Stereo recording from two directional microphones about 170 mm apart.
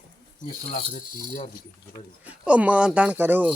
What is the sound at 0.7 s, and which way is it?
Rattle, 45° left (ahead or behind).